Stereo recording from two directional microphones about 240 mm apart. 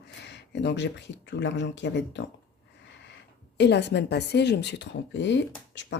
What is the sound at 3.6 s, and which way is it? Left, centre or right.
Speech, left.